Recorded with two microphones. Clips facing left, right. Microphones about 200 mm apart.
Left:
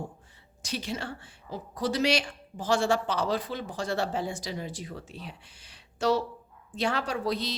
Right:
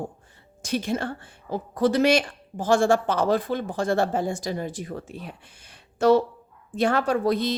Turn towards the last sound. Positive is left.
turn(degrees=-55)  # may be behind; listen again after turning